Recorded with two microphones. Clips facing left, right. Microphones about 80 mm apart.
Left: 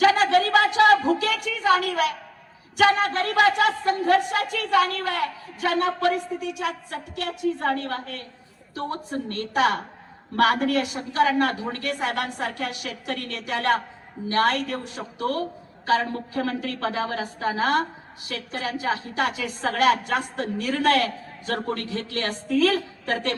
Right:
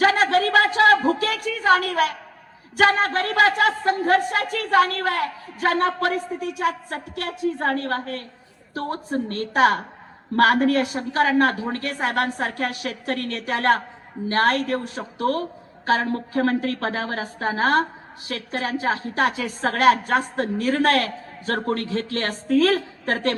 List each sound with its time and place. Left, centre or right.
0.0 s a sound: right
2.7 s a man's voice: right
11.2 s a man's voice: right
11.7 s a man's voice: right
12.0 s a man's voice: right